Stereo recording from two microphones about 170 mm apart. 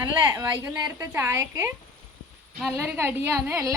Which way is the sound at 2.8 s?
15° right (ahead or behind).